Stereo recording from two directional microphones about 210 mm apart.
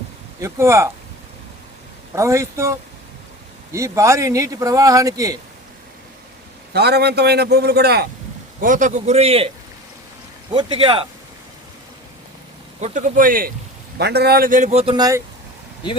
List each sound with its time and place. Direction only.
0.4 s speech: 15° right (ahead or behind)
2.1 s speech: 15° right (ahead or behind)
6.7 s a man's voice: 50° right (ahead or behind)
8.6 s a man's voice: 35° right (ahead or behind)
10.5 s speech: 20° right (ahead or behind)
12.8 s a man's voice: 40° right (ahead or behind); by 15.2 s 20° right (ahead or behind)